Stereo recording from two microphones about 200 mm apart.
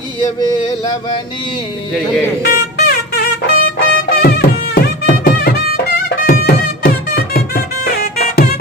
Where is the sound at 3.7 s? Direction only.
50° left (ahead or behind).